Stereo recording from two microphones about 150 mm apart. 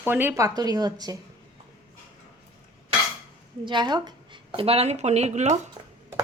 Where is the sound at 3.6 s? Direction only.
30° right (ahead or behind); by 5.6 s 50° right (ahead or behind).